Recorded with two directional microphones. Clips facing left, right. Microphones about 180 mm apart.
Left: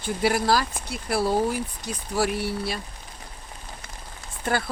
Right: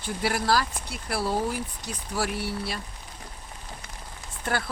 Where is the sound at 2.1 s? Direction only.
20° left (ahead or behind).